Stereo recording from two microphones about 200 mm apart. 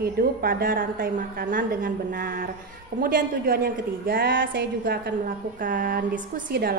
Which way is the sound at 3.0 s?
45° right (ahead or behind).